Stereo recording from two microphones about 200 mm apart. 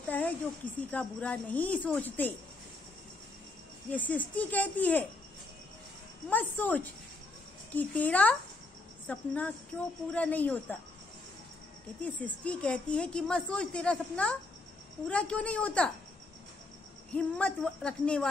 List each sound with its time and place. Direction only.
0.1 s a sound: 10° left (ahead or behind)
0.9 s a woman's voice: 5° left (ahead or behind)
3.9 s a woman's voice: 10° left (ahead or behind)
6.3 s a woman's voice: 10° left (ahead or behind)
12.0 s a woman's voice: 5° left (ahead or behind)
17.1 s a woman's voice: 5° left (ahead or behind)